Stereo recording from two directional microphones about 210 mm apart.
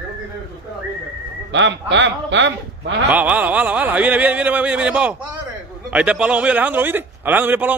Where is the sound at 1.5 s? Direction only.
60° right (ahead or behind).